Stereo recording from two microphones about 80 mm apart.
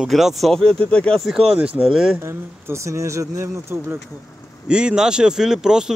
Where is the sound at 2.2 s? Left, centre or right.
Right.